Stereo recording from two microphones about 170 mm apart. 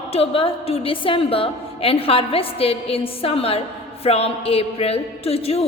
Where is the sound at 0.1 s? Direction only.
35° left (ahead or behind).